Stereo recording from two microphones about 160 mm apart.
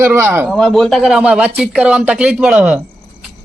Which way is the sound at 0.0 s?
15° right (ahead or behind).